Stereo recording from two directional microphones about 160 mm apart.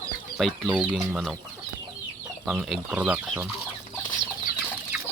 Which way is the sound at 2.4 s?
5° right (ahead or behind).